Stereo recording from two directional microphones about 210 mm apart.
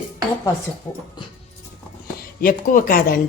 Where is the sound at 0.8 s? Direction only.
25° left (ahead or behind).